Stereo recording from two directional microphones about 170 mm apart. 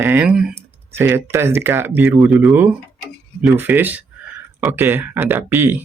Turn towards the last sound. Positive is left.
turn(degrees=-10)  # may be behind; listen again after turning